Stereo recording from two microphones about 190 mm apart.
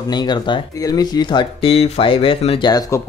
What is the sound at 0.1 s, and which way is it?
Speech, 20° left (ahead or behind).